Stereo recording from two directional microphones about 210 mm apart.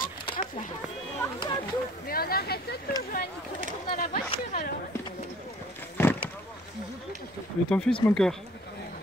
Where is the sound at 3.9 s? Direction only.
45° left (ahead or behind).